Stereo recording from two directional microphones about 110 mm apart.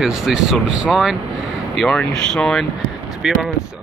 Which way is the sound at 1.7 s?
5° left (ahead or behind).